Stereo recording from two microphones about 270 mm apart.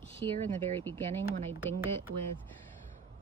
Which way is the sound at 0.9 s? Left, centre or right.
Centre.